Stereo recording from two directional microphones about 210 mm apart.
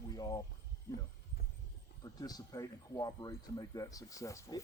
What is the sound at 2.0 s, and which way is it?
A man's voice, 20° left (ahead or behind).